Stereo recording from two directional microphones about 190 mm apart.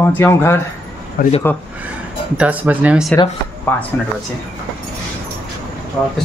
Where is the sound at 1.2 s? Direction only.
50° left (ahead or behind).